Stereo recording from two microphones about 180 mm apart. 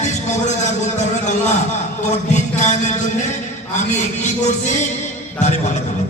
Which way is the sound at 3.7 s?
40° left (ahead or behind).